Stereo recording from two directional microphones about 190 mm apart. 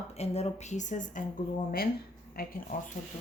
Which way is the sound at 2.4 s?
50° left (ahead or behind).